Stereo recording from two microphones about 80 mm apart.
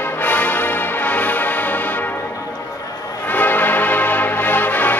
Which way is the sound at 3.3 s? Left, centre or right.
Left.